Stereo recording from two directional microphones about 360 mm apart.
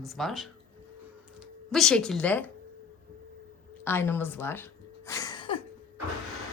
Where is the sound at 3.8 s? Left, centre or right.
Centre.